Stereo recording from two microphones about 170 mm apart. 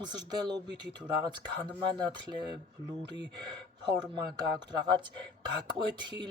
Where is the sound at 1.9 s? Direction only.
25° right (ahead or behind).